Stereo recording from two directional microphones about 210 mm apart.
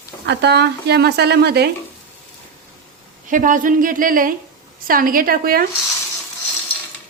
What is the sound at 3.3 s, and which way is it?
Speech, 40° right (ahead or behind).